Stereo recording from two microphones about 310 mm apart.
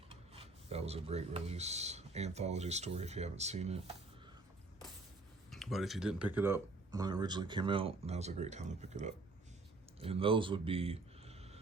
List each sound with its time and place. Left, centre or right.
0.1 s speech: centre
5.5 s speech: centre